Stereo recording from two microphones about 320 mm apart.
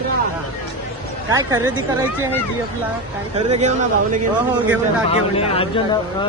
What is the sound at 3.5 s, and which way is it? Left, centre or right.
Speech, right.